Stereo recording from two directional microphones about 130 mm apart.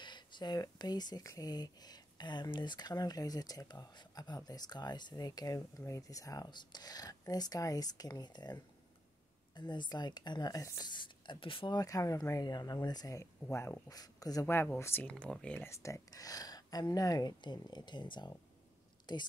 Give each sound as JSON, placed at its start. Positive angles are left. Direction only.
{"t": 0.0, "sound": "speech", "side_deg": 35}
{"t": 10.9, "sound": "speech", "side_deg": 35}
{"t": 14.4, "sound": "speech", "side_deg": 15}
{"t": 15.7, "sound": "a woman's voice", "side_deg": 25}